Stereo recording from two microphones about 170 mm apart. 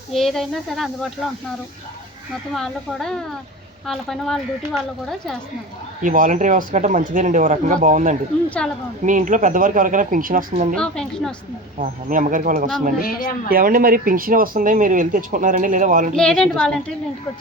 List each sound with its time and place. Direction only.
0.1 s a woman's voice: centre (ahead or behind)
2.6 s a woman's voice: 5° left (ahead or behind)
6.0 s speech: 50° right (ahead or behind)
8.4 s speech: 5° left (ahead or behind)
9.0 s speech: 50° right (ahead or behind)
10.8 s a woman's voice: 5° left (ahead or behind)
11.8 s speech: 50° right (ahead or behind)
13.0 s speech: 55° left (ahead or behind)
13.5 s speech: 55° right (ahead or behind)
16.1 s a woman's voice: 5° left (ahead or behind)